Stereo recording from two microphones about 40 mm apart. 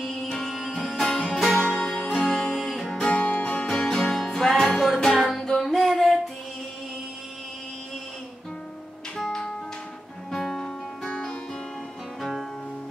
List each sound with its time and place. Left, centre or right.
0.0 s music: centre
0.5 s music: centre
1.6 s music: centre
2.4 s music: centre
2.9 s music: left
3.6 s music: centre
10.3 s music: centre
11.1 s music: centre
12.2 s music: centre